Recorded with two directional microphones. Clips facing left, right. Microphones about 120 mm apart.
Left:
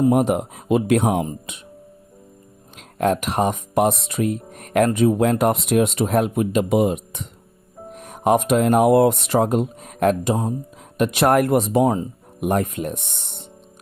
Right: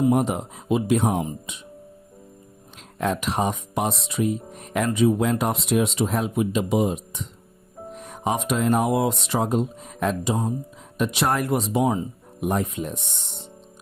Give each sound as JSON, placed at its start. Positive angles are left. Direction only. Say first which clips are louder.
{"t": 0.1, "sound": "speech", "louder": "left 4 dB", "side_deg": 55}
{"t": 3.0, "sound": "speech", "louder": "left 4 dB", "side_deg": 55}
{"t": 8.2, "sound": "speech", "louder": "left 7 dB", "side_deg": 55}